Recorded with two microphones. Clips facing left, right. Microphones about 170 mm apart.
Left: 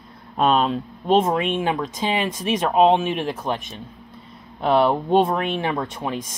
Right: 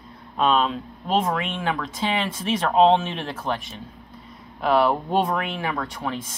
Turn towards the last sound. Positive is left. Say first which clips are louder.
# left 2 dB
turn(degrees=15)  # may be behind; listen again after turning